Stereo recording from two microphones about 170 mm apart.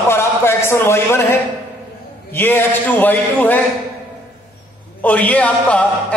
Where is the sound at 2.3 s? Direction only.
10° left (ahead or behind).